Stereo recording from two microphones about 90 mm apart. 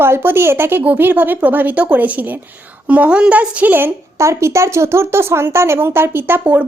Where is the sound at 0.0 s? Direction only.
25° right (ahead or behind).